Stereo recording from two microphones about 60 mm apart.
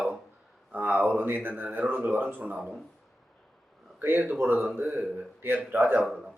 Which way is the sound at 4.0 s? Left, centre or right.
Right.